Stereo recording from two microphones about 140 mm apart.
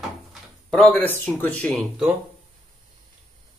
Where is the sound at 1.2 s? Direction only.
10° left (ahead or behind).